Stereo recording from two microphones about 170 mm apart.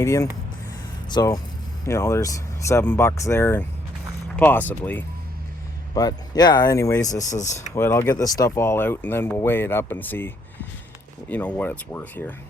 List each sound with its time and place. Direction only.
0.0 s speech: 20° left (ahead or behind)
5.9 s speech: 20° left (ahead or behind)